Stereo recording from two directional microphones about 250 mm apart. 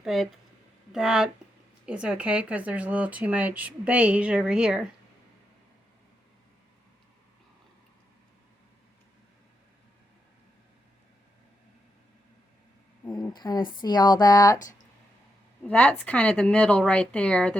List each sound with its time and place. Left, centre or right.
0.0 s speech: centre
13.1 s a sound: centre
13.8 s speech: centre